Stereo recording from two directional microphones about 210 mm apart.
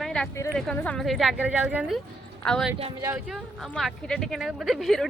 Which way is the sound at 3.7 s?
5° left (ahead or behind).